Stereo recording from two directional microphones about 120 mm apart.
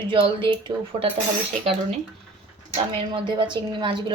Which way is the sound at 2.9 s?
45° right (ahead or behind).